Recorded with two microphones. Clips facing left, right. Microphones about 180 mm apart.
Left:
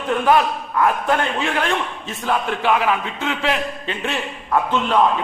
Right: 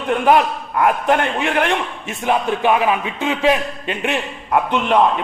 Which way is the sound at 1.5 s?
60° right (ahead or behind).